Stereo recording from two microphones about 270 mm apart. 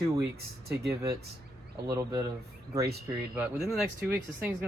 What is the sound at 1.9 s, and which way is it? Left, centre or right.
Speech, centre.